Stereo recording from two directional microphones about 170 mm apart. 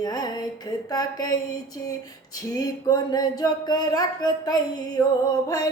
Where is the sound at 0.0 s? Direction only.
25° left (ahead or behind).